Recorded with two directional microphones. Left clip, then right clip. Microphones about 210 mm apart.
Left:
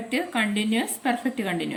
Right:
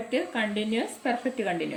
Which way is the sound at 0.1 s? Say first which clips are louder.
Left 3 dB; 35° left (ahead or behind).